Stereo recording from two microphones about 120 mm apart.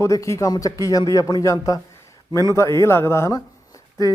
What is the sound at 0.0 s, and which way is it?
Speech, 25° left (ahead or behind).